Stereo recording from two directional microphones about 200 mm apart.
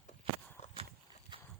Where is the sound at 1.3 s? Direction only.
25° right (ahead or behind).